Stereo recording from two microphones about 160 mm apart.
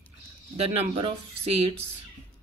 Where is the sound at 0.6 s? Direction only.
30° right (ahead or behind).